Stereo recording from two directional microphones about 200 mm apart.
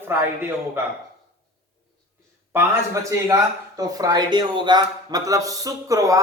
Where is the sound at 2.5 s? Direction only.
15° right (ahead or behind).